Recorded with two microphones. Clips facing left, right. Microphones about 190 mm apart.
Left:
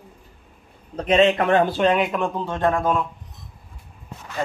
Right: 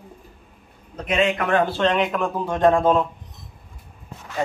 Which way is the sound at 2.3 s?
15° right (ahead or behind).